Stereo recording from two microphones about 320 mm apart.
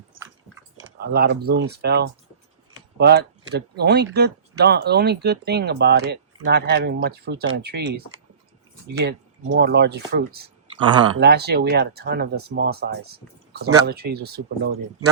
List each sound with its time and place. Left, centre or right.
0.9 s speech: right